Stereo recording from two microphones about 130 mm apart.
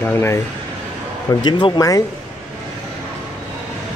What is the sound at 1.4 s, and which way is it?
Speech, 35° left (ahead or behind).